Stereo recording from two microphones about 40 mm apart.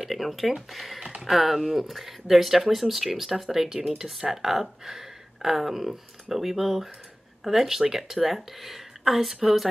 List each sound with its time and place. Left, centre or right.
0.0 s speech: centre